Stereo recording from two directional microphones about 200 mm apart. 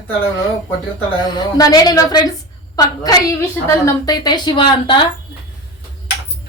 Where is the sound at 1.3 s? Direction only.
20° left (ahead or behind).